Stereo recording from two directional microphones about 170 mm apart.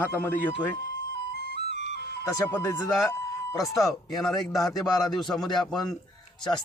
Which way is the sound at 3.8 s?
Centre (ahead or behind).